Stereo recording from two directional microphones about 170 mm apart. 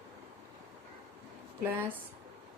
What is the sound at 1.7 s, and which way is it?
Speech, 10° right (ahead or behind).